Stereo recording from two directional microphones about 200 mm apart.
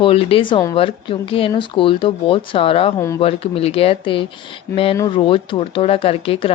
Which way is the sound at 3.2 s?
30° left (ahead or behind).